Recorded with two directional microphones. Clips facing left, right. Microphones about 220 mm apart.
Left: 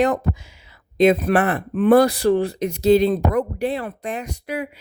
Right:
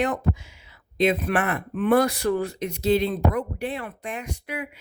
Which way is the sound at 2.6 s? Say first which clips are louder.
Left 7 dB; 40° left (ahead or behind).